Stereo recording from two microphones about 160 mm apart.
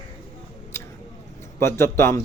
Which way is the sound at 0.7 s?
15° left (ahead or behind).